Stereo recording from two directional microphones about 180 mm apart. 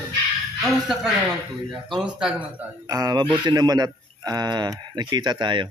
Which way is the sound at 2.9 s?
20° right (ahead or behind).